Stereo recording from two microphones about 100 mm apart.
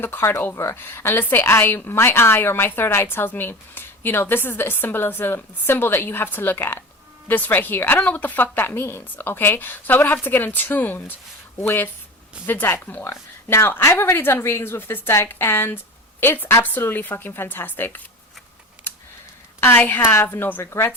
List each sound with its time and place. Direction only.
0.0 s a woman's voice: 25° left (ahead or behind)
19.5 s a woman's voice: 20° left (ahead or behind)